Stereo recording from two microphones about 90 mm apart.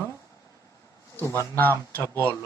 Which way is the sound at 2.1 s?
30° right (ahead or behind).